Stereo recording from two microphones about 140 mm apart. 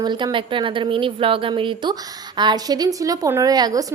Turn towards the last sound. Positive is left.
turn(degrees=-25)  # may be behind; listen again after turning